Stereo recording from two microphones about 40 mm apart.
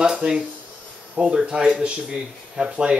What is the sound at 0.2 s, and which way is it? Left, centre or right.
Speech, right.